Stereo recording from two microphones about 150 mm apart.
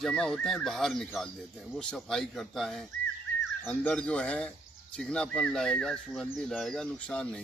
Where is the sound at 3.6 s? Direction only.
15° left (ahead or behind).